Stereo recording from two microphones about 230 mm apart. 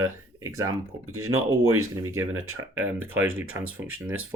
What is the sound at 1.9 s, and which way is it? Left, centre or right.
Speech, centre.